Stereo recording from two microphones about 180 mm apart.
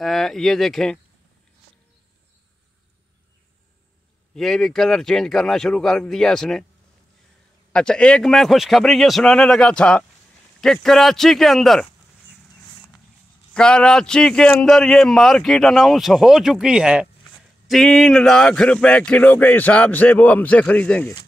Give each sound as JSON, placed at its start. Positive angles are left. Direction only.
{"t": 0.0, "sound": "a man's voice", "side_deg": 0}
{"t": 4.4, "sound": "a man's voice", "side_deg": 0}
{"t": 7.7, "sound": "a man's voice", "side_deg": 5}
{"t": 13.5, "sound": "a man's voice", "side_deg": 5}